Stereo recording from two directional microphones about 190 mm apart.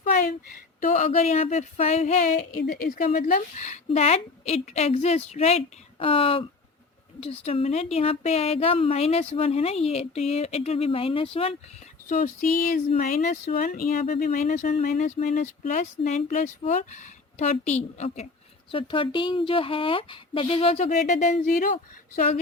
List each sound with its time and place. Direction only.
0.8 s speech: 40° left (ahead or behind)
2.4 s speech: 50° left (ahead or behind); by 11.5 s 30° left (ahead or behind)
12.0 s a woman's voice: 45° left (ahead or behind)